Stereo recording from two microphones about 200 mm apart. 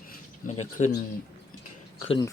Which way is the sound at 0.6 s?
35° left (ahead or behind).